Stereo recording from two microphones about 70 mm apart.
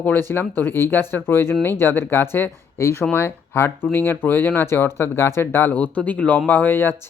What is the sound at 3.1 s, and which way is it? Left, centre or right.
Speech, left.